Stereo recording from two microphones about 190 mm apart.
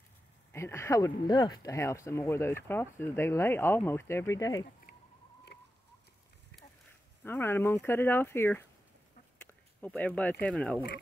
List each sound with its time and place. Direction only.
0.5 s speech: 15° left (ahead or behind)
5.5 s chicken: 60° left (ahead or behind)
7.2 s speech: 10° left (ahead or behind)
9.5 s a sound: 10° left (ahead or behind)
10.4 s speech: 5° left (ahead or behind)